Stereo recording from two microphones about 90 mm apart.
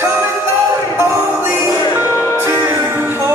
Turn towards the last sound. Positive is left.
turn(degrees=-25)  # may be behind; listen again after turning